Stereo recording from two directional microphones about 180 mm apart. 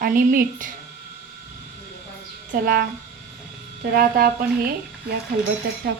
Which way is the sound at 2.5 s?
55° right (ahead or behind).